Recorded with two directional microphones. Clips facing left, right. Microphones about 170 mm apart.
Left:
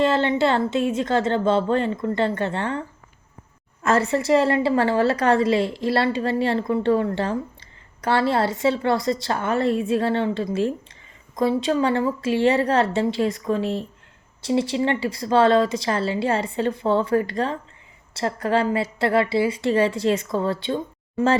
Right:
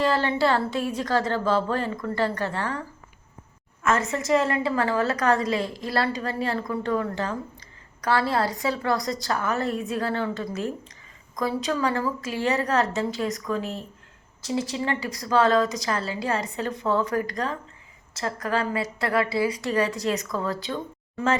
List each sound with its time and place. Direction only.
0.0 s a woman's voice: 25° left (ahead or behind)
3.8 s a woman's voice: 35° left (ahead or behind)